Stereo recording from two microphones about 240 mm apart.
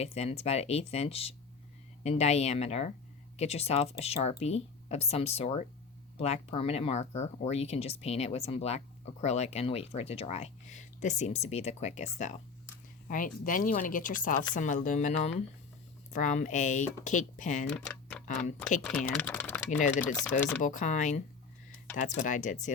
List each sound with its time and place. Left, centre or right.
0.0 s speech: left
17.7 s speech: centre
19.8 s speech: left
20.1 s speech: centre
20.6 s speech: left